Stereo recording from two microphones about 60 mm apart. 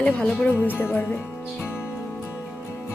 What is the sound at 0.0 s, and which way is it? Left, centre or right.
Speech, left.